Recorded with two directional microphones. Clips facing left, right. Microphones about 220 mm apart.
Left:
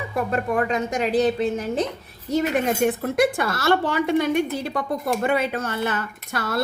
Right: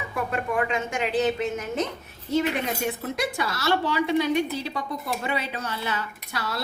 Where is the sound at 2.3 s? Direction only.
45° left (ahead or behind).